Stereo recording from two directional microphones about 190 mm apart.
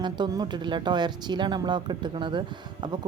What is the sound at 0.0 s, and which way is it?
Speech, 20° right (ahead or behind).